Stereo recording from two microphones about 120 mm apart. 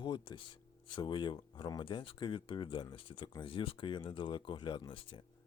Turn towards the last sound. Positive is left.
turn(degrees=45)  # may be behind; listen again after turning